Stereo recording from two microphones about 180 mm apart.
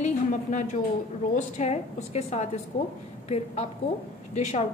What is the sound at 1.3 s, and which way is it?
A woman's voice, 40° left (ahead or behind).